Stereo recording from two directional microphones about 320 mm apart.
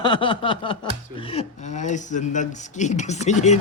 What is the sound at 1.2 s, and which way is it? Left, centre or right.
Speech, centre.